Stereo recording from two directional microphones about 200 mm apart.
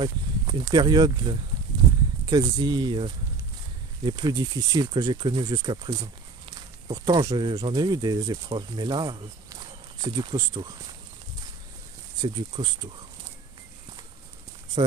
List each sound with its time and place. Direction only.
0.0 s speech: 25° right (ahead or behind)
12.6 s speech: 25° right (ahead or behind)